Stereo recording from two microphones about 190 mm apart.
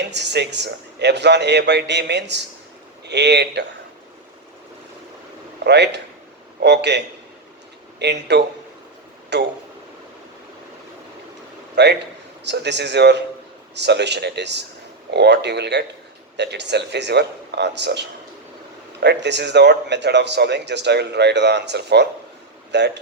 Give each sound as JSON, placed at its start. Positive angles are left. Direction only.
{"t": 0.0, "sound": "a man's voice", "side_deg": -65}
{"t": 5.6, "sound": "a man's voice", "side_deg": -65}
{"t": 11.7, "sound": "a man's voice", "side_deg": -60}